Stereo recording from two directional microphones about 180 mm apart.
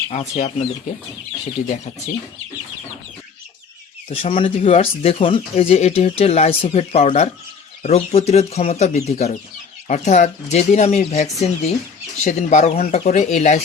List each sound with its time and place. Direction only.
0.1 s speech: 40° left (ahead or behind)
4.1 s speech: 35° left (ahead or behind)